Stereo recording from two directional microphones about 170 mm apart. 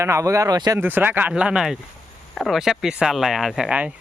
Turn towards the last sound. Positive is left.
turn(degrees=-5)  # may be behind; listen again after turning